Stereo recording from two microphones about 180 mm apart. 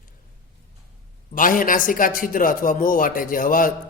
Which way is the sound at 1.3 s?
50° left (ahead or behind).